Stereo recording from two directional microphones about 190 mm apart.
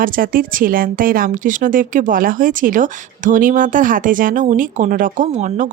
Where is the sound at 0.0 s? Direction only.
50° right (ahead or behind).